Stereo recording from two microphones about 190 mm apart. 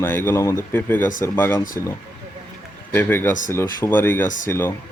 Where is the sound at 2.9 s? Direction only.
10° left (ahead or behind).